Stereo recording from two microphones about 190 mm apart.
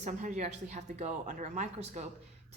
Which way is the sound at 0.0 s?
40° right (ahead or behind).